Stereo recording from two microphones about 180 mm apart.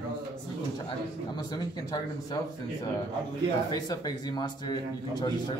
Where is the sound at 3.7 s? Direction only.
20° left (ahead or behind).